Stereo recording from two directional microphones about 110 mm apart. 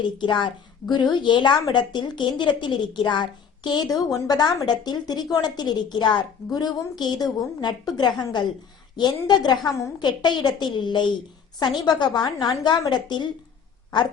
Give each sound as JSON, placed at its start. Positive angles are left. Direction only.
{"t": 0.2, "sound": "a woman's voice", "side_deg": 45}